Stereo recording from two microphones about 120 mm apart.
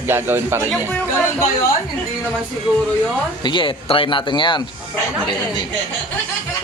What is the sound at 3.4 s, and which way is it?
Speech, 45° left (ahead or behind).